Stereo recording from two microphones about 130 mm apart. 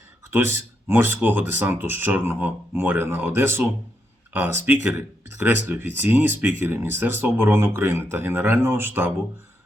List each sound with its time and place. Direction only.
0.3 s speech: 15° right (ahead or behind)